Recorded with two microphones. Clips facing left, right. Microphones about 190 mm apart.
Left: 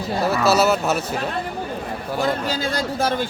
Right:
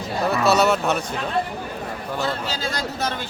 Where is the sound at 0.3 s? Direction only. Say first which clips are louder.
Even; centre (ahead or behind).